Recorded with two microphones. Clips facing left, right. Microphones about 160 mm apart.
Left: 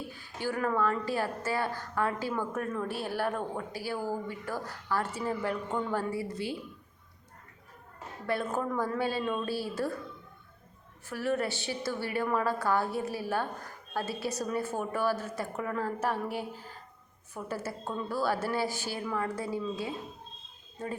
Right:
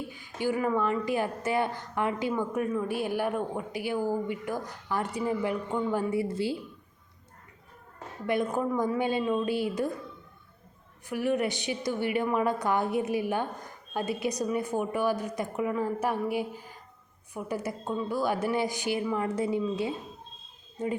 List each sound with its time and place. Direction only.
0.1 s a woman's voice: 15° right (ahead or behind)
8.3 s speech: 15° right (ahead or behind)
11.1 s speech: 15° right (ahead or behind)